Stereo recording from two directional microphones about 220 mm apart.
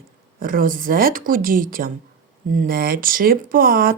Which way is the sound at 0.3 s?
40° right (ahead or behind).